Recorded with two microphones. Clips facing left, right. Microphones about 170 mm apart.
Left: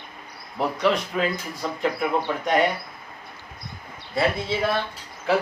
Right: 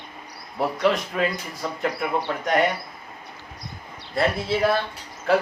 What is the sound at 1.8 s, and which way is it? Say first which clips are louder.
Speech: left 2 dB; centre (ahead or behind).